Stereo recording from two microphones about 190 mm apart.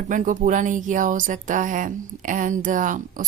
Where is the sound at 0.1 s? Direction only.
45° right (ahead or behind).